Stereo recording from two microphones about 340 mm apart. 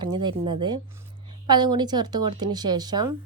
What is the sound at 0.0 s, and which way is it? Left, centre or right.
A woman's voice, centre.